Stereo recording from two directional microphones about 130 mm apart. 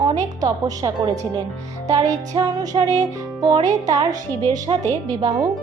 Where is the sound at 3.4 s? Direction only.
30° right (ahead or behind).